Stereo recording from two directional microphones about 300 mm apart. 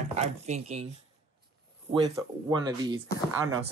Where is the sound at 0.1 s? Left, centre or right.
Right.